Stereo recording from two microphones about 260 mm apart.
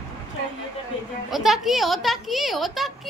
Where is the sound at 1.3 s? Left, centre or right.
Centre.